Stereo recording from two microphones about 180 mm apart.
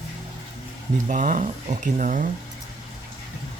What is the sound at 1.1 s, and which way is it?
Speech, 45° right (ahead or behind).